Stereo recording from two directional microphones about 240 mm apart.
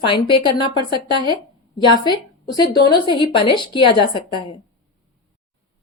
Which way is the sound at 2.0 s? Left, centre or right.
Centre.